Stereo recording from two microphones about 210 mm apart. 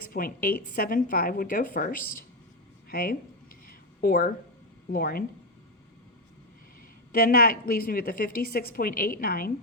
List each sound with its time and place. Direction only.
0.1 s a woman's voice: 45° left (ahead or behind)
3.7 s a sound: 45° left (ahead or behind)
4.9 s a woman's voice: 45° left (ahead or behind)
7.1 s a woman's voice: 45° left (ahead or behind)